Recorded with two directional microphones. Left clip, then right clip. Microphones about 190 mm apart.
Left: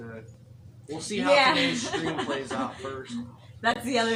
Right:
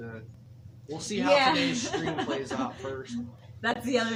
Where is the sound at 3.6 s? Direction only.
5° left (ahead or behind).